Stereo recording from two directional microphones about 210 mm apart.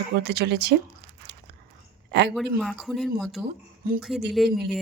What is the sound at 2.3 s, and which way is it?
Speech, centre (ahead or behind).